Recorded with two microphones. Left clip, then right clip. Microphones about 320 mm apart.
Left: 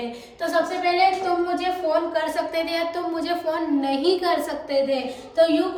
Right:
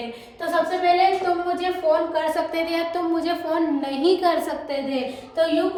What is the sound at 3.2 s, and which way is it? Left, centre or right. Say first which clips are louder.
A woman's voice: right 1 dB; centre.